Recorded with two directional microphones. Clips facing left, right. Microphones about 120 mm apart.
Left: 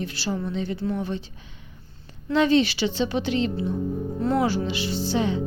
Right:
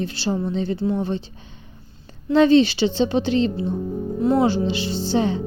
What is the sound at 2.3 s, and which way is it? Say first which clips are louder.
Speech: right 5 dB; 30° right (ahead or behind).